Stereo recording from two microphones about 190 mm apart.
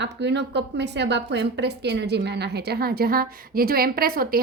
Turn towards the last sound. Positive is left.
turn(degrees=-50)  # may be behind; listen again after turning